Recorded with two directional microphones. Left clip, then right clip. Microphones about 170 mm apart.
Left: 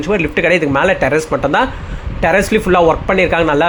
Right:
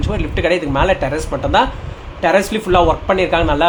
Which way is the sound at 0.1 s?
25° left (ahead or behind).